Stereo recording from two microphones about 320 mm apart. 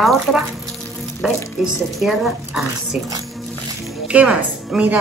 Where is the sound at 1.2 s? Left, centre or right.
Centre.